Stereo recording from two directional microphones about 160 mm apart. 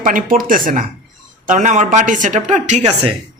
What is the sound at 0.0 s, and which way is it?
A man's voice, 55° right (ahead or behind).